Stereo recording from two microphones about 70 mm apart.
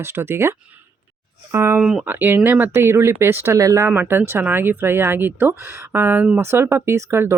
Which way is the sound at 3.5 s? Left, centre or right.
Right.